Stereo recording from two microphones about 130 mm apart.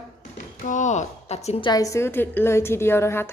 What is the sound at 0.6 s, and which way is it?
Speech, 70° left (ahead or behind).